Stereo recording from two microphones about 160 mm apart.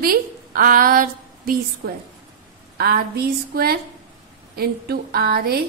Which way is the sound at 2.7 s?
75° right (ahead or behind).